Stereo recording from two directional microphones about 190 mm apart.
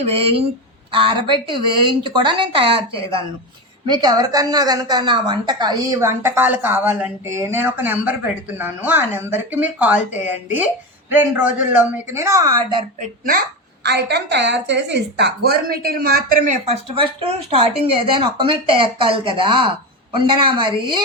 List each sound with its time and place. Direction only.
0.0 s a woman's voice: 30° right (ahead or behind)
13.0 s speech: 50° right (ahead or behind)
13.8 s a woman's voice: 60° right (ahead or behind); by 21.0 s 25° right (ahead or behind)